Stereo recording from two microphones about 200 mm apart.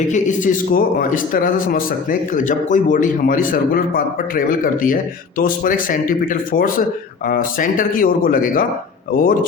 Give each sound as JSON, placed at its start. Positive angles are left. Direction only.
{"t": 0.1, "sound": "a man's voice", "side_deg": 40}